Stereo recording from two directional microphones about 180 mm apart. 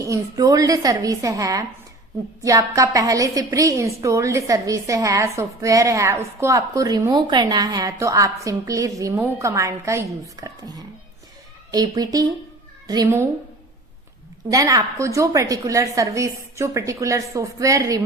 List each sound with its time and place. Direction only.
0.0 s a woman's voice: 20° right (ahead or behind)
14.5 s a woman's voice: 20° right (ahead or behind)